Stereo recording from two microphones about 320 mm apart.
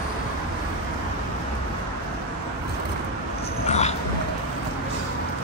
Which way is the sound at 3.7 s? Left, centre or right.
Left.